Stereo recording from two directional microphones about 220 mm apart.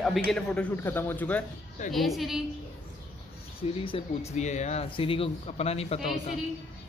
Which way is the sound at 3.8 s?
25° left (ahead or behind).